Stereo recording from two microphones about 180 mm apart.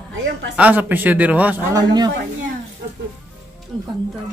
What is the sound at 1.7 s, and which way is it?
Speech, 20° right (ahead or behind).